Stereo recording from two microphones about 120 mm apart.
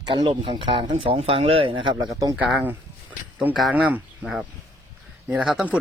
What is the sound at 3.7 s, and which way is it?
Speech, 10° right (ahead or behind).